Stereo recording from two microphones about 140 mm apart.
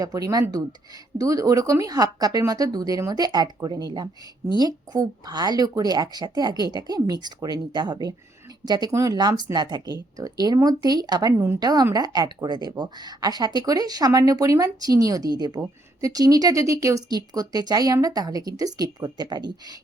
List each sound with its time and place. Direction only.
0.0 s a woman's voice: 25° right (ahead or behind)